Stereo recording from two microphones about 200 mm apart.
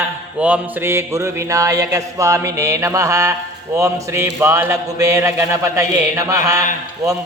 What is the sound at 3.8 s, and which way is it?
Speech, 15° right (ahead or behind).